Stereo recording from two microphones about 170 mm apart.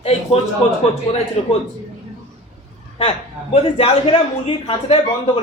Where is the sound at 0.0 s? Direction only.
35° left (ahead or behind).